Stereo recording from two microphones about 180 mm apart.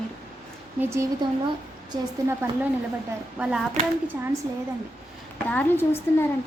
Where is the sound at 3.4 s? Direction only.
5° right (ahead or behind).